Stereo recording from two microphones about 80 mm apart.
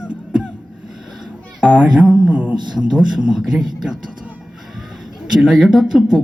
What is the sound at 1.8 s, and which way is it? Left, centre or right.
Speech, centre.